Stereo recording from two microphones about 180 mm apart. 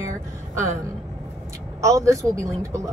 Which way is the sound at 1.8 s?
15° right (ahead or behind).